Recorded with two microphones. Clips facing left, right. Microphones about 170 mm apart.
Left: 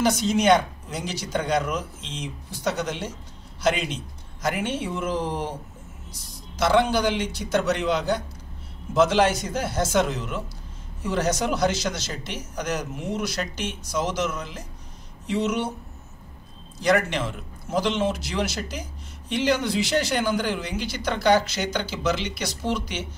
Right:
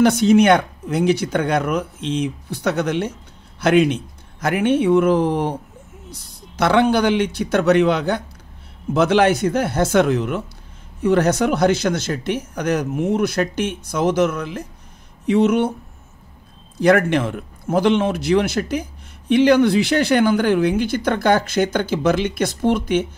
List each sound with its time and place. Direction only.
0.0 s speech: 60° right (ahead or behind)
16.7 s speech: 55° right (ahead or behind)